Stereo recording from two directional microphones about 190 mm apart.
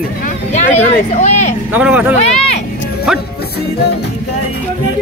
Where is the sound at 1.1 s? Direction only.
40° left (ahead or behind).